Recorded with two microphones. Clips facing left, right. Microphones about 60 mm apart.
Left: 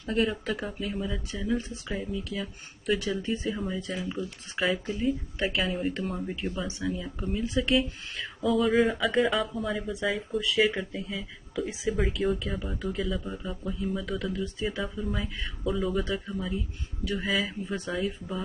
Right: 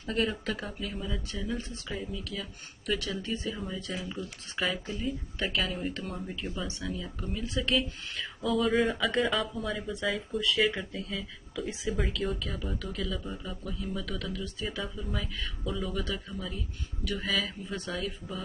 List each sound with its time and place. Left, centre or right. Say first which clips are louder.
0.1 s speech: left 3 dB; centre
12.2 s speech: left 7 dB; centre
12.7 s speech: left 4 dB; centre
13.1 s speech: left 3 dB; centre
14.3 s speech: left 5 dB; left
14.8 s speech: left 4 dB; centre
15.2 s speech: left 4 dB; centre